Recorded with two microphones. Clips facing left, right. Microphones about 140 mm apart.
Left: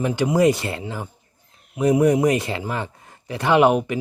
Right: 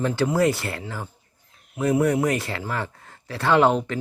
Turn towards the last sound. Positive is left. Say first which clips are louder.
# left 2 dB
turn(degrees=15)  # may be behind; listen again after turning